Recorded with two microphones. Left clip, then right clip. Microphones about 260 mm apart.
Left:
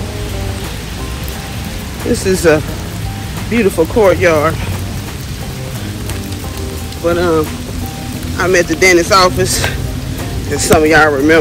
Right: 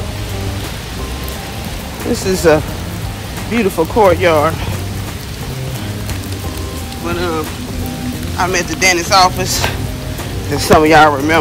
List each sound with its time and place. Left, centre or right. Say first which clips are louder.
2.2 s speech: even; centre
7.1 s speech: left 7 dB; centre
8.4 s speech: left 4 dB; centre
10.8 s speech: right 1 dB; right